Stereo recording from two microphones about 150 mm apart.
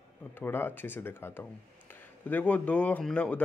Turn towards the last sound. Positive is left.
turn(degrees=10)  # may be behind; listen again after turning